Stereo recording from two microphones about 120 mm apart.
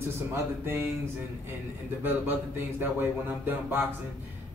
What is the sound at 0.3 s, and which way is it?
Speech, 20° right (ahead or behind).